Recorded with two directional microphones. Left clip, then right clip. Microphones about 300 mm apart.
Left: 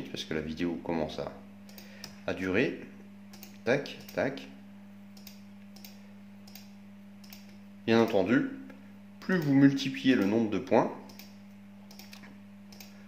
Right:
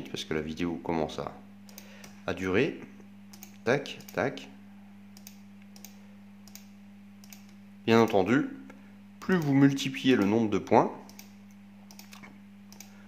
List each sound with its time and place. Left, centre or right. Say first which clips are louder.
0.1 s speech: right 3 dB; centre
7.8 s speech: right 2 dB; centre